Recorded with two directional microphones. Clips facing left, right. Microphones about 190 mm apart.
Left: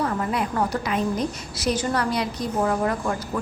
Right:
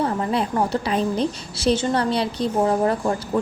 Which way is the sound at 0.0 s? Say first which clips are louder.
Right 3 dB; 30° right (ahead or behind).